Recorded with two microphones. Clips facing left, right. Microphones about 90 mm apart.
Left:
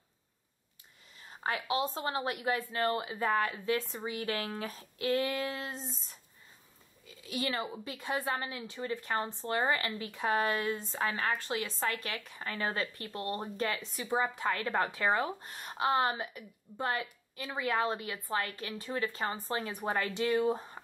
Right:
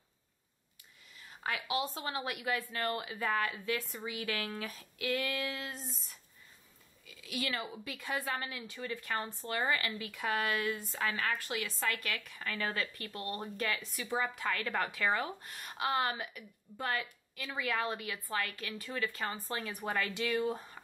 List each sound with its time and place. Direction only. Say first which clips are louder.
1.2 s speech: left 3 dB; 30° left (ahead or behind)